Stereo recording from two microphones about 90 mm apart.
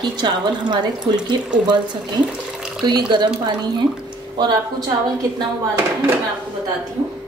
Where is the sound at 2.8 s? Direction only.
55° right (ahead or behind).